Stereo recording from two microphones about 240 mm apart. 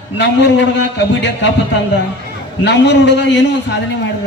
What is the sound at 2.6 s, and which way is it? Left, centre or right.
A man's voice, left.